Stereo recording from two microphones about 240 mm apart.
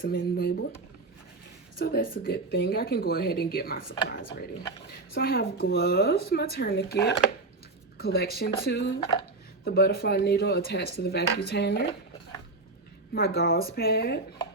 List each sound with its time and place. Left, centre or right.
0.0 s speech: left
1.8 s speech: left
7.9 s speech: left
13.1 s speech: left